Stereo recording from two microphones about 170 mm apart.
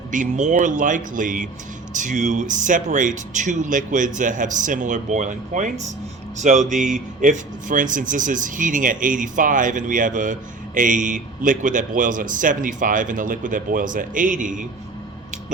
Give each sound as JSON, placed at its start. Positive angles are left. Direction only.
{"t": 0.1, "sound": "speech", "side_deg": -45}